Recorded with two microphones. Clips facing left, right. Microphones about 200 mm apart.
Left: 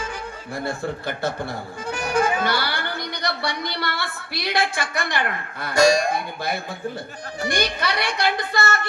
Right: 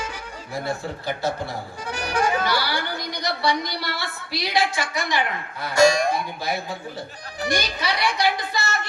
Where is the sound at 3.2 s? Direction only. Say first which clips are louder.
Right 4 dB; 55° left (ahead or behind).